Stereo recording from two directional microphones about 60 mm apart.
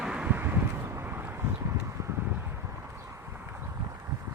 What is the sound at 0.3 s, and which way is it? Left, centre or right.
Vehicle, right.